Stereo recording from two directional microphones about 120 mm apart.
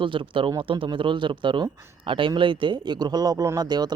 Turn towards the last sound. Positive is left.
turn(degrees=-35)  # may be behind; listen again after turning